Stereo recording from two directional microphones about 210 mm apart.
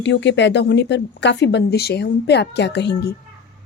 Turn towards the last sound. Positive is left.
turn(degrees=55)  # may be behind; listen again after turning